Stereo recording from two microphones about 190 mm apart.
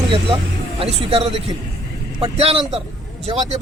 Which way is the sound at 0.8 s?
30° right (ahead or behind).